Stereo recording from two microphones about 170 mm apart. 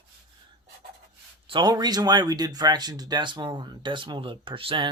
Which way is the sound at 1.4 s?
25° right (ahead or behind).